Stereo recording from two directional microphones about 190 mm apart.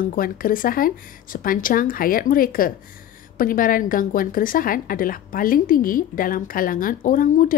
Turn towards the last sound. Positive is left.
turn(degrees=45)  # may be behind; listen again after turning